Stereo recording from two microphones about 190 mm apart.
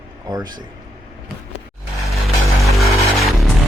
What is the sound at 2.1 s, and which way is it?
Music, centre (ahead or behind).